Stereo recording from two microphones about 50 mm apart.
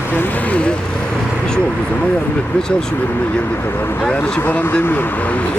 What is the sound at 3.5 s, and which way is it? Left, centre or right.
Speech, left.